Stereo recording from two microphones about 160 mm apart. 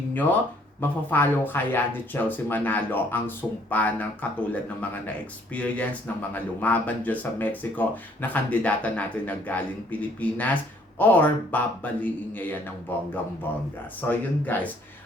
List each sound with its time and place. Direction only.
0.1 s speech: 10° left (ahead or behind)
14.1 s speech: 10° left (ahead or behind)